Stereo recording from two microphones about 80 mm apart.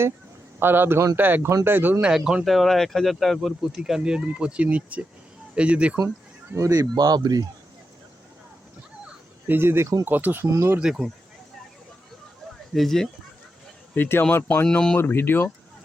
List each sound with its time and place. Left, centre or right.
0.6 s speech: right
2.0 s speech: centre
6.5 s speech: right
6.9 s speech: right
9.5 s speech: right
10.4 s speech: right
10.8 s speech: centre
12.7 s speech: centre
13.9 s speech: left